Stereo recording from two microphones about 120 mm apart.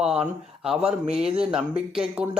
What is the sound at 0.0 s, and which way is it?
Speech, 5° right (ahead or behind).